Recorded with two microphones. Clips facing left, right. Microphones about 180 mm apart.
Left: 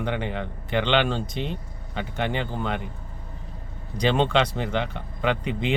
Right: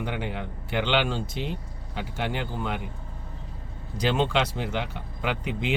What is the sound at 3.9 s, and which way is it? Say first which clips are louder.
Speech: left 3 dB; 5° right (ahead or behind).